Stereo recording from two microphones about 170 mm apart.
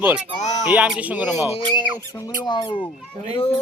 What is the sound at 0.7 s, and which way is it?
Speech, 10° right (ahead or behind).